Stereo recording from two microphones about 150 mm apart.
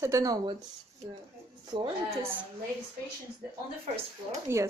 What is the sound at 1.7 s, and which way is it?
Speech, 35° right (ahead or behind).